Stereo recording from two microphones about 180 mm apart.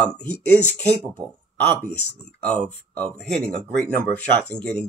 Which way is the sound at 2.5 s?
5° left (ahead or behind).